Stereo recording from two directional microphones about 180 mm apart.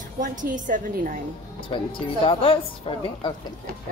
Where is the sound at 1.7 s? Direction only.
30° left (ahead or behind).